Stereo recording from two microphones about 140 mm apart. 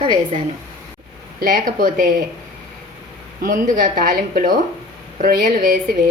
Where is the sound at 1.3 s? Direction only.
80° right.